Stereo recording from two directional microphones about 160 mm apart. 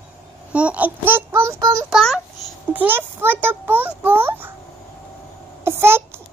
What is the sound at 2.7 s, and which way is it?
A child's voice, 10° right (ahead or behind).